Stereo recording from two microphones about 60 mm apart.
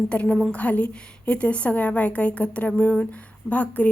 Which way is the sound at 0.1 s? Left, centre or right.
Centre.